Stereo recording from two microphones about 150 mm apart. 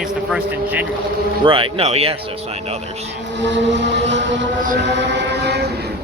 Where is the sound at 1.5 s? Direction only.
35° right (ahead or behind).